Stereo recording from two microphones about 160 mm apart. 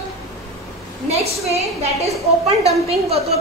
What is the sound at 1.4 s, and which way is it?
A woman's voice, 40° right (ahead or behind).